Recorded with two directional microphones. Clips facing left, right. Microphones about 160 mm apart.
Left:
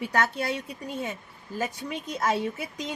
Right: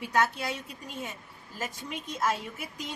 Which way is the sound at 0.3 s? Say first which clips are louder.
Left 5 dB; 65° left (ahead or behind).